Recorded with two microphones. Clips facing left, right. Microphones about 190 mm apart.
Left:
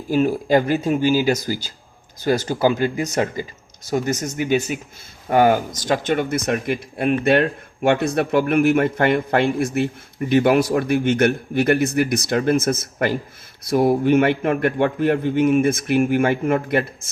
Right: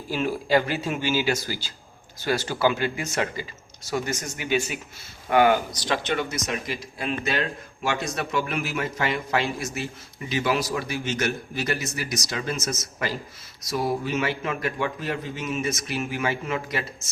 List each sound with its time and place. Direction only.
0.1 s speech: 45° left (ahead or behind)